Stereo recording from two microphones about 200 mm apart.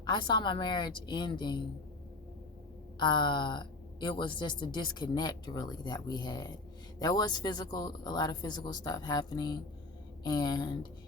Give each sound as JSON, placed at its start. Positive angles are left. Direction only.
{"t": 0.0, "sound": "a woman's voice", "side_deg": 20}
{"t": 3.0, "sound": "a woman's voice", "side_deg": 25}